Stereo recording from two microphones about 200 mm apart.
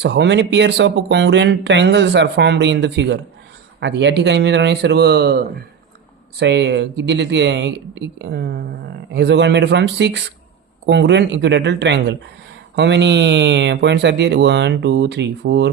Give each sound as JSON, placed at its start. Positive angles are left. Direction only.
{"t": 0.0, "sound": "speech", "side_deg": -60}